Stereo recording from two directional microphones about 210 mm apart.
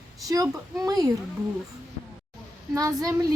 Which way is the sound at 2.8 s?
15° right (ahead or behind).